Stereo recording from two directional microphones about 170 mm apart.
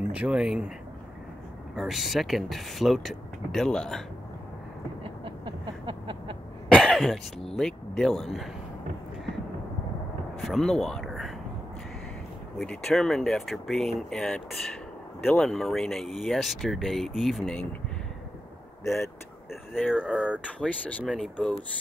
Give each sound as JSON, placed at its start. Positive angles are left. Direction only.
{"t": 0.0, "sound": "speech", "side_deg": -5}
{"t": 1.8, "sound": "speech", "side_deg": 0}
{"t": 5.0, "sound": "a sound", "side_deg": -30}
{"t": 6.7, "sound": "cough", "side_deg": 5}
{"t": 7.5, "sound": "speech", "side_deg": 0}
{"t": 10.4, "sound": "speech", "side_deg": 0}
{"t": 12.5, "sound": "speech", "side_deg": 0}
{"t": 19.9, "sound": "speech", "side_deg": -5}
{"t": 20.3, "sound": "speech", "side_deg": 10}